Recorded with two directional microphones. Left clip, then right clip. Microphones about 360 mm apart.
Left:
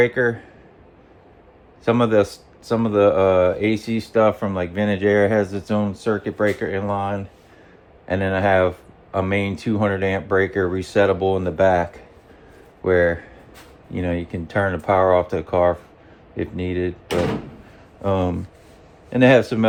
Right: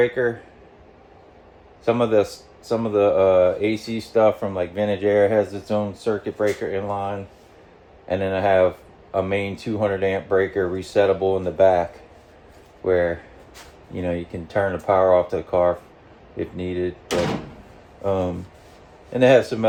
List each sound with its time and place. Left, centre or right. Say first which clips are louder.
0.0 s speech: left 2 dB; left
1.8 s speech: left 1 dB; left
18.0 s speech: left 1 dB; left